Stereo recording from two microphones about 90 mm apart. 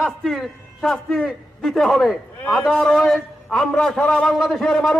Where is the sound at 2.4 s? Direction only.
15° left (ahead or behind).